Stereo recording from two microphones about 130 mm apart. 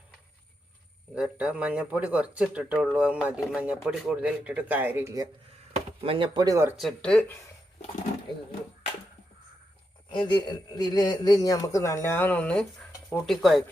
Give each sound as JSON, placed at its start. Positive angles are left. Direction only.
{"t": 1.1, "sound": "speech", "side_deg": -10}
{"t": 5.7, "sound": "speech", "side_deg": -45}
{"t": 6.7, "sound": "speech", "side_deg": 5}
{"t": 10.1, "sound": "a man's voice", "side_deg": 35}